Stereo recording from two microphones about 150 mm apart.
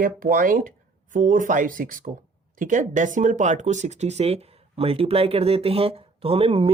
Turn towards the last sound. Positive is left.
turn(degrees=-40)  # may be behind; listen again after turning